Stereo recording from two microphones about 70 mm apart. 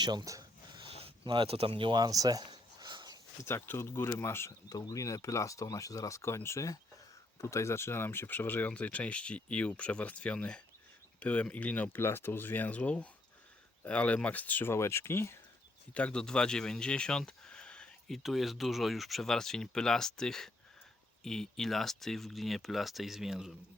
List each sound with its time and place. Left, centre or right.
0.0 s speech: right
1.9 s a sound: right
3.4 s speech: left
4.7 s speech: left
12.0 s speech: left
14.7 s speech: left
16.0 s speech: centre
18.1 s speech: centre